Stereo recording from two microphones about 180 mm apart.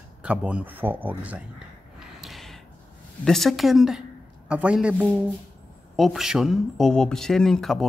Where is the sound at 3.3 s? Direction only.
Centre (ahead or behind).